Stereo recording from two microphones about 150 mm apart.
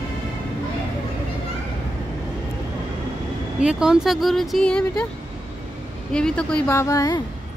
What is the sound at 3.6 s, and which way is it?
Speech, 5° right (ahead or behind).